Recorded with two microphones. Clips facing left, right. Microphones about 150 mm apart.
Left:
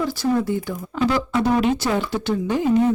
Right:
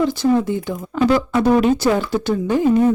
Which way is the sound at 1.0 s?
50° right (ahead or behind).